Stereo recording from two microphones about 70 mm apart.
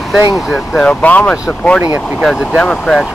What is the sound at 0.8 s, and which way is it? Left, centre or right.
Speech, centre.